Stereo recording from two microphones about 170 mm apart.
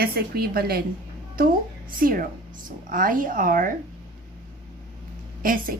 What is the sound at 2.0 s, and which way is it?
A woman's voice, 55° right (ahead or behind).